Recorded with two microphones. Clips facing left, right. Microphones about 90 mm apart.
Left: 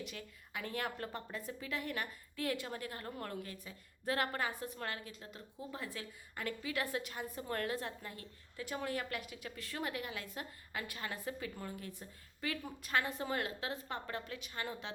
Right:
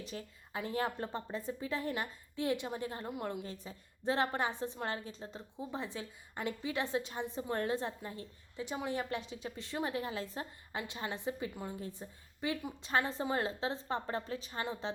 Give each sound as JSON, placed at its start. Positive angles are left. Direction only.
{"t": 0.0, "sound": "a woman's voice", "side_deg": -30}
{"t": 3.4, "sound": "a woman's voice", "side_deg": -30}